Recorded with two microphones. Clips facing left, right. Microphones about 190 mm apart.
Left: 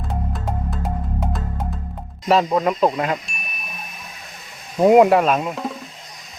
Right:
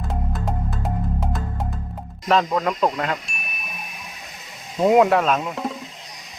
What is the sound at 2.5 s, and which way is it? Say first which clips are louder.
Speech: left 3 dB; 20° left (ahead or behind).